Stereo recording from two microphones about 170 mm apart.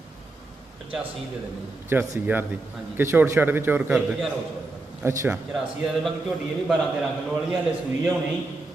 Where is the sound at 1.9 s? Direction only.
10° right (ahead or behind).